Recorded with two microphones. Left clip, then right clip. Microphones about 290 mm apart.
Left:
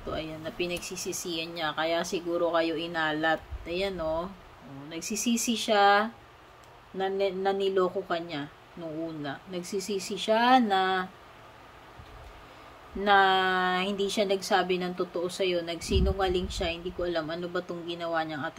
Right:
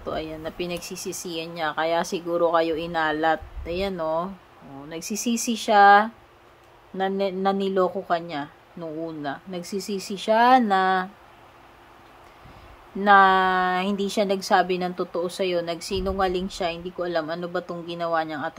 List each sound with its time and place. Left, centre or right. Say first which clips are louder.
0.1 s speech: right 4 dB; centre
13.0 s speech: right 6 dB; centre